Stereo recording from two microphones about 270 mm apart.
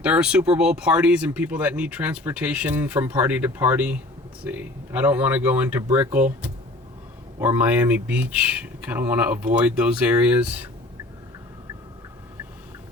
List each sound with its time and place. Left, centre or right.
0.0 s speech: centre
7.3 s speech: centre